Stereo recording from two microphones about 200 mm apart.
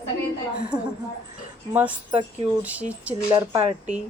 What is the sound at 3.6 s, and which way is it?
Speech, 30° right (ahead or behind).